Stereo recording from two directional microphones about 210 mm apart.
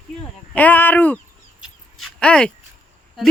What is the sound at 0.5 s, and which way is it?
Speech, 10° left (ahead or behind).